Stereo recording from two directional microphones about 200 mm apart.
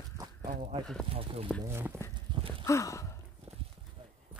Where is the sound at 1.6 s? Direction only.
10° right (ahead or behind).